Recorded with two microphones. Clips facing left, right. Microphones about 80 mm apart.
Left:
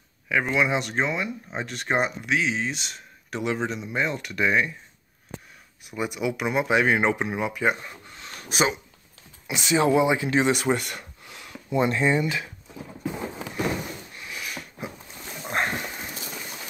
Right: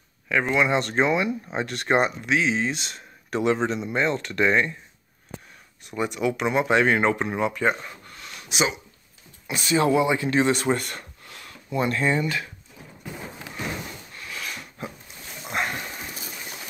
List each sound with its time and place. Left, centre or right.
0.3 s speech: centre
5.9 s speech: centre
8.4 s a sound: left
9.5 s speech: centre
14.1 s a sound: centre
15.6 s dog: left